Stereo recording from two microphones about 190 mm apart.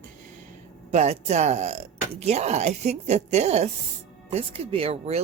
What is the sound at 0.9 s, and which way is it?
Speech, 35° right (ahead or behind).